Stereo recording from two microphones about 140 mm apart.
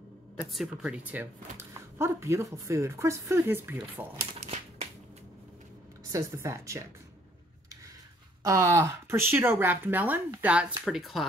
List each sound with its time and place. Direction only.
0.5 s speech: 5° right (ahead or behind)
4.4 s a sound: 50° right (ahead or behind)
6.1 s speech: 20° right (ahead or behind)
8.5 s speech: 20° right (ahead or behind); by 11.2 s centre (ahead or behind)